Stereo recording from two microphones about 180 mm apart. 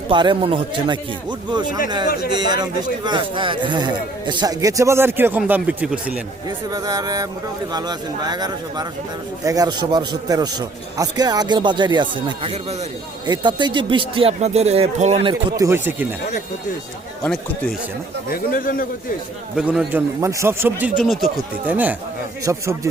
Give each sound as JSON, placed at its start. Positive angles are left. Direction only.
{"t": 0.1, "sound": "a man's voice", "side_deg": -25}
{"t": 6.7, "sound": "a man's voice", "side_deg": -20}
{"t": 15.3, "sound": "speech", "side_deg": -25}
{"t": 18.3, "sound": "a man's voice", "side_deg": 50}
{"t": 19.5, "sound": "speech", "side_deg": -5}
{"t": 21.0, "sound": "speech", "side_deg": 0}